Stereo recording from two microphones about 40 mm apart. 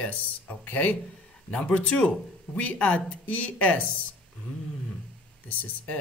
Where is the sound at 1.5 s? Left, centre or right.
Left.